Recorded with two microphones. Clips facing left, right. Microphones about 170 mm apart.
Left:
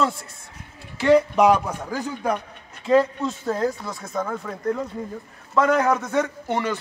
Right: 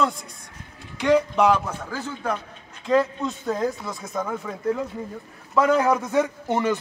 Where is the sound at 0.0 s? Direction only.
5° left (ahead or behind).